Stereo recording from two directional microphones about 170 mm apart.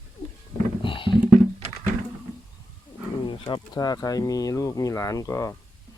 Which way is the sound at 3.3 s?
30° left (ahead or behind).